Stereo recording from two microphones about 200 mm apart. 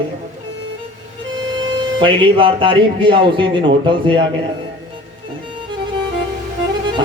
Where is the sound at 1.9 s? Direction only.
25° right (ahead or behind).